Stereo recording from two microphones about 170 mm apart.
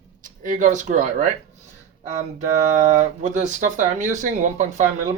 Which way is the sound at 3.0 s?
45° right (ahead or behind).